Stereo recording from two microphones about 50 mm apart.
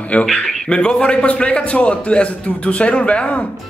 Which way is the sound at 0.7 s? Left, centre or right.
Left.